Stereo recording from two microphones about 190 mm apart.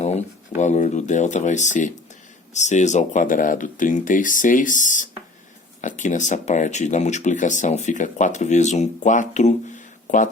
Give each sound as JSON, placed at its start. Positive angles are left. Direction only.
{"t": 0.0, "sound": "speech", "side_deg": 35}